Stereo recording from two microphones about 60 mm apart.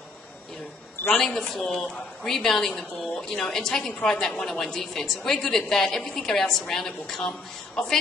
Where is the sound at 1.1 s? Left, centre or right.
Centre.